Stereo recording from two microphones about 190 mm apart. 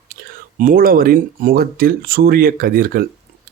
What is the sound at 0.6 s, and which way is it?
Speech, 50° right (ahead or behind).